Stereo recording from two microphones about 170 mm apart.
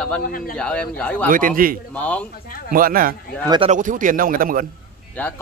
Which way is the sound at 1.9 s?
10° left (ahead or behind).